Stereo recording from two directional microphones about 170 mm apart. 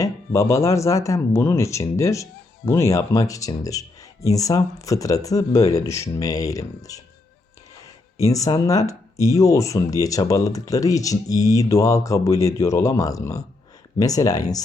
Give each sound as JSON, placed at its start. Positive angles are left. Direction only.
{"t": 0.0, "sound": "speech", "side_deg": 15}
{"t": 8.2, "sound": "speech", "side_deg": 20}